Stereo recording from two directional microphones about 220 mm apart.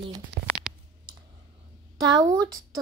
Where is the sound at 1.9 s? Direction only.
15° right (ahead or behind).